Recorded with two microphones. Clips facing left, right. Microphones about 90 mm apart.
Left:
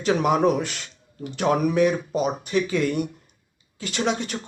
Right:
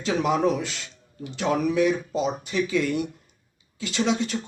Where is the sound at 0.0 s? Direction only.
55° left (ahead or behind).